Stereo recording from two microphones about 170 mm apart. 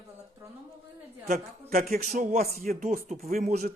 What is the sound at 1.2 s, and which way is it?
Speech, 55° right (ahead or behind).